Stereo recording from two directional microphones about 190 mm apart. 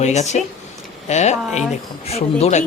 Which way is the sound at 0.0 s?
35° left (ahead or behind).